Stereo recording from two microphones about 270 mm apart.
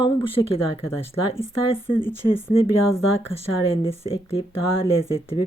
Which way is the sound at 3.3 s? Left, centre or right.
Left.